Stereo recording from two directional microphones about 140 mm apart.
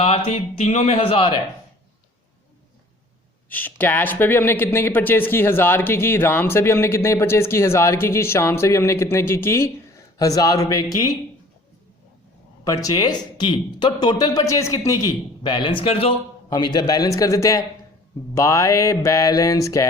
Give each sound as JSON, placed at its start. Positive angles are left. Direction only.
{"t": 0.0, "sound": "speech", "side_deg": 50}
{"t": 3.5, "sound": "speech", "side_deg": 10}
{"t": 12.6, "sound": "speech", "side_deg": 25}
{"t": 15.4, "sound": "speech", "side_deg": 35}
{"t": 16.5, "sound": "speech", "side_deg": 30}